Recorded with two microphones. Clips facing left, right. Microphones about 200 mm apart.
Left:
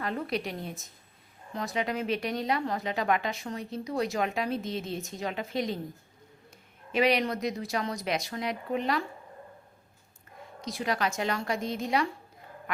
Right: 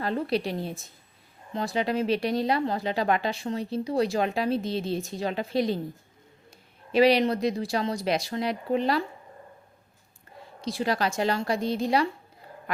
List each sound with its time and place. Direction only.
0.0 s speech: 30° right (ahead or behind)
6.9 s speech: 35° right (ahead or behind)
10.6 s speech: 30° right (ahead or behind)